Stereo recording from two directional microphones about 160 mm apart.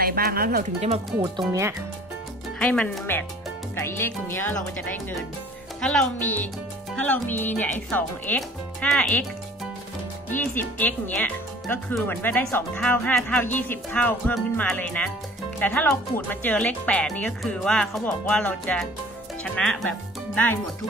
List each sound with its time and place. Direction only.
0.0 s speech: 70° right (ahead or behind)
0.7 s speech: 45° right (ahead or behind)
1.2 s speech: 20° right (ahead or behind)
2.6 s speech: 5° left (ahead or behind)
3.7 s speech: 15° left (ahead or behind)
10.3 s speech: 10° left (ahead or behind)